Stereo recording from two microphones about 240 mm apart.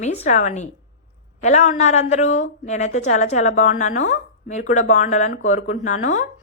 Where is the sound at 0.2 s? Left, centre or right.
Left.